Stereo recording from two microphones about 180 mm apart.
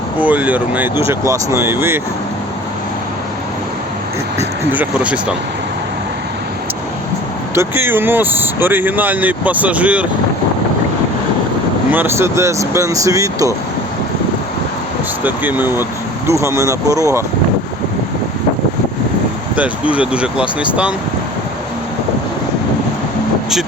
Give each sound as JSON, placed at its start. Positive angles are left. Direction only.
{"t": 0.2, "sound": "speech", "side_deg": -10}
{"t": 4.7, "sound": "speech", "side_deg": -10}
{"t": 7.5, "sound": "speech", "side_deg": -15}
{"t": 11.9, "sound": "speech", "side_deg": -10}
{"t": 15.2, "sound": "speech", "side_deg": -10}
{"t": 19.5, "sound": "speech", "side_deg": -5}